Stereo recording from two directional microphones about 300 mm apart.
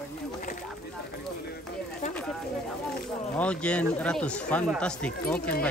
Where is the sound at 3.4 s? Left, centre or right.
Centre.